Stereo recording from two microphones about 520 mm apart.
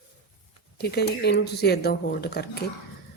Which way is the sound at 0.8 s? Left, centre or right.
Centre.